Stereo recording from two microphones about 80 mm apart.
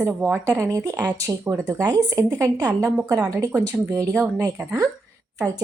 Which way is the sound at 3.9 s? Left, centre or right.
Right.